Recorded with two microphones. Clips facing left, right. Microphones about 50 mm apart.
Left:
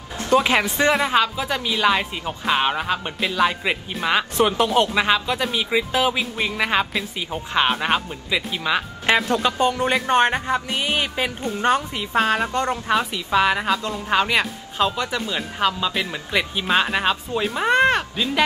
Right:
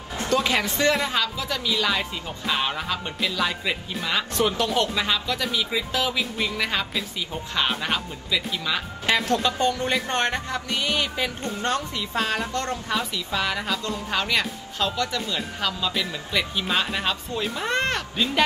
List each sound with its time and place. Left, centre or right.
0.3 s speech: left
11.4 s speech: centre
12.0 s speech: left